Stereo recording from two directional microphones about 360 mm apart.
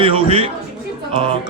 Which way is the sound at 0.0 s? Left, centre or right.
Centre.